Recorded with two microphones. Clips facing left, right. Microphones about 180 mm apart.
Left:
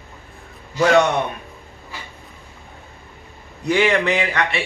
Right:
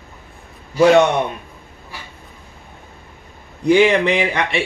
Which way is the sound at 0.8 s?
20° right (ahead or behind).